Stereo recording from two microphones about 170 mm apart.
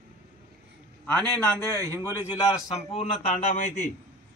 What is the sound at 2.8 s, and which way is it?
A man's voice, 40° left (ahead or behind).